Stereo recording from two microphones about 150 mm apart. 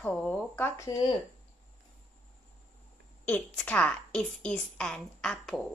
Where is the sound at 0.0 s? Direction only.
5° left (ahead or behind).